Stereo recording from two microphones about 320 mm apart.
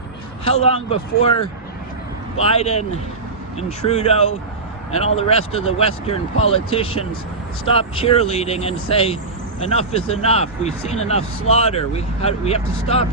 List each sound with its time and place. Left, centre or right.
0.4 s speech: centre
2.4 s speech: centre